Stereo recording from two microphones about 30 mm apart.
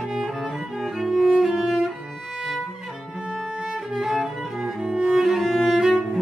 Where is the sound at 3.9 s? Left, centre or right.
Centre.